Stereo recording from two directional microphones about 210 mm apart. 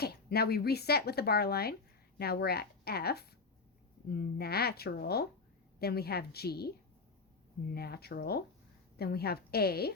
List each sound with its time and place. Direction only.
0.0 s speech: 50° left (ahead or behind)
7.7 s speech: 50° left (ahead or behind)